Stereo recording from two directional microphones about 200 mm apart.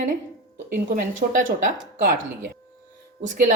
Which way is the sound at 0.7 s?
40° right (ahead or behind).